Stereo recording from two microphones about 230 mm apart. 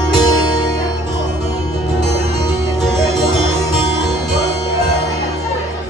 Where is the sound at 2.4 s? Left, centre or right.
Centre.